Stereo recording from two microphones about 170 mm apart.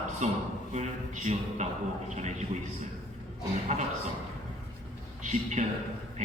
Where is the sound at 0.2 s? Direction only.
45° right (ahead or behind).